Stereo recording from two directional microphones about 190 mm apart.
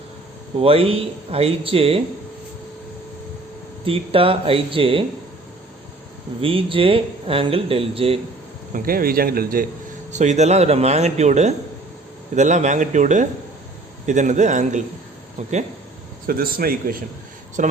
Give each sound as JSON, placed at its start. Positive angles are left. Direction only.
{"t": 0.6, "sound": "speech", "side_deg": -30}
{"t": 3.8, "sound": "speech", "side_deg": -30}
{"t": 6.4, "sound": "speech", "side_deg": -30}
{"t": 8.7, "sound": "speech", "side_deg": -50}
{"t": 10.1, "sound": "speech", "side_deg": -40}
{"t": 16.2, "sound": "speech", "side_deg": -50}